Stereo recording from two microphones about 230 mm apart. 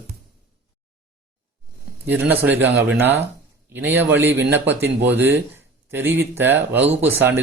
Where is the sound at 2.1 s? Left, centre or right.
Centre.